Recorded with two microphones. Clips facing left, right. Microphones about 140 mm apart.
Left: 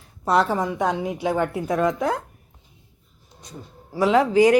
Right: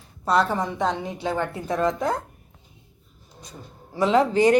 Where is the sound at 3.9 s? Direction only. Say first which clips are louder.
Left 2 dB; 10° left (ahead or behind).